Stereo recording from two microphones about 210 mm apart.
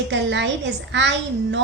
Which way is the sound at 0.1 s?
60° right (ahead or behind).